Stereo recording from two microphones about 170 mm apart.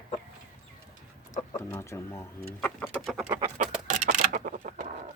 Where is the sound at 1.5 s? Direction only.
15° left (ahead or behind).